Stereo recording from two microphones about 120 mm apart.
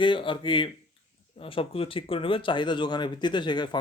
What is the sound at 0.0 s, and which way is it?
Speech, 45° left (ahead or behind).